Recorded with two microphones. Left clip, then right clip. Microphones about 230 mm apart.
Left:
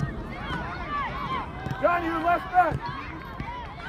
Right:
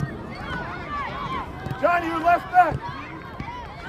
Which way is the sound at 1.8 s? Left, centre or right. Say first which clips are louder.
Right 3 dB; right.